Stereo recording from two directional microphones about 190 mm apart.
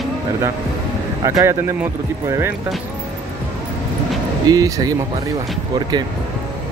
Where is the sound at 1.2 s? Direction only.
15° right (ahead or behind).